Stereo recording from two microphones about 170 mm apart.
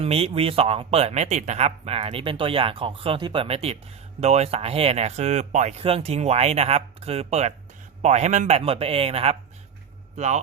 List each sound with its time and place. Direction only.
0.0 s a man's voice: 35° right (ahead or behind)